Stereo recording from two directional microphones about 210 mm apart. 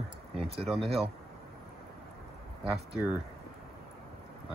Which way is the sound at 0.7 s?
25° right (ahead or behind).